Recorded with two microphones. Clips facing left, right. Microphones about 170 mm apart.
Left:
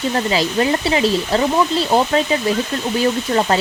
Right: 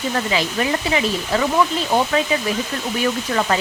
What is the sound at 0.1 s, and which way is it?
A woman's voice, 35° left (ahead or behind).